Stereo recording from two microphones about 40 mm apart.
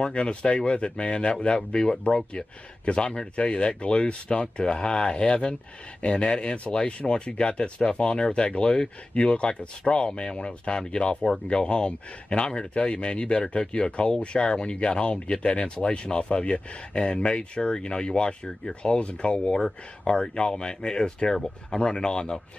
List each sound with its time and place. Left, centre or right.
0.0 s speech: left